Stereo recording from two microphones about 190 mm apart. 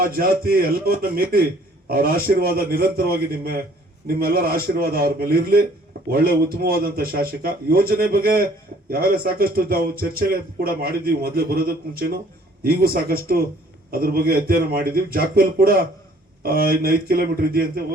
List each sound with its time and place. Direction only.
0.0 s a man's voice: 50° right (ahead or behind)